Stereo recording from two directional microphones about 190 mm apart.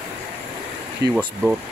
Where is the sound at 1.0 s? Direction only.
65° right (ahead or behind).